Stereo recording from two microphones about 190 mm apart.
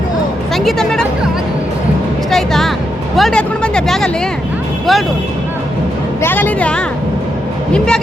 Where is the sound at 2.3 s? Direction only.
Centre (ahead or behind).